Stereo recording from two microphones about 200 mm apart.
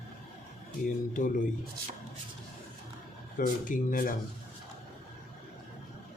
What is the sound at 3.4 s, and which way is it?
Speech, 40° left (ahead or behind).